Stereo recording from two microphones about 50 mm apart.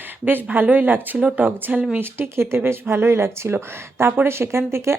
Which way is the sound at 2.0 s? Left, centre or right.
Right.